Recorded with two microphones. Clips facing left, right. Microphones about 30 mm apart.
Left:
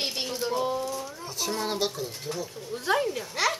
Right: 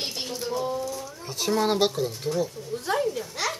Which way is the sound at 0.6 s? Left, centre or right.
Left.